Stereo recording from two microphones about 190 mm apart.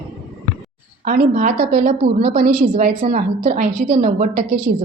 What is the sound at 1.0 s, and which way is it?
A woman's voice, 45° right (ahead or behind).